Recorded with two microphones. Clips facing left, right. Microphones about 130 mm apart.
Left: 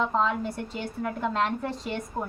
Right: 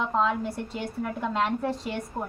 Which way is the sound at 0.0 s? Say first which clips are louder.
Even; 5° right (ahead or behind).